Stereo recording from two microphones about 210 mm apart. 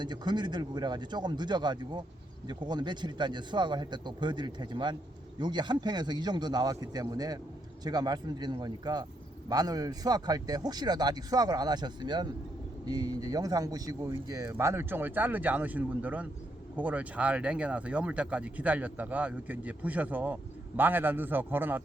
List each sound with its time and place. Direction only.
0.0 s speech: 20° right (ahead or behind)